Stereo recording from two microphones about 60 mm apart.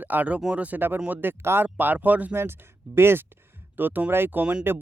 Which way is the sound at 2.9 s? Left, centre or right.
Right.